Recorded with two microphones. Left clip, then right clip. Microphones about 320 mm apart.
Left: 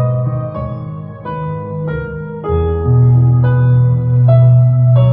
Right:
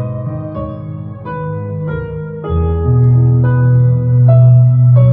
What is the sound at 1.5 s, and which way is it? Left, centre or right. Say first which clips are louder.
Music: left 1 dB; left.